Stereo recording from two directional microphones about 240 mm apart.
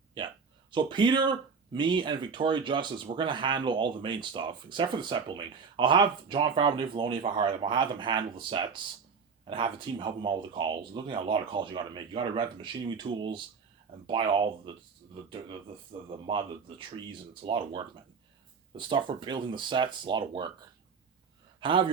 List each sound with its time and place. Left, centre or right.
0.2 s a sound: centre
0.7 s speech: centre
18.8 s speech: centre
21.6 s a man's voice: right